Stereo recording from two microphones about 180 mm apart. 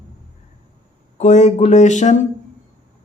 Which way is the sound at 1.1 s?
40° left (ahead or behind).